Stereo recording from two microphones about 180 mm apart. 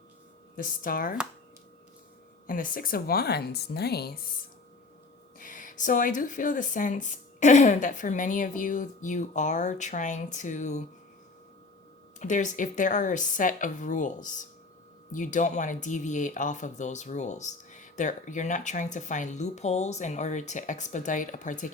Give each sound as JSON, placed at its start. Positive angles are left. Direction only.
{"t": 0.5, "sound": "speech", "side_deg": 50}
{"t": 2.5, "sound": "speech", "side_deg": 50}
{"t": 5.4, "sound": "speech", "side_deg": 50}
{"t": 12.2, "sound": "speech", "side_deg": 45}